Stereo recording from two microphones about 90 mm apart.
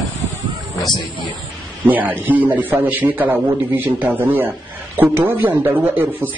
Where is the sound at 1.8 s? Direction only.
20° right (ahead or behind).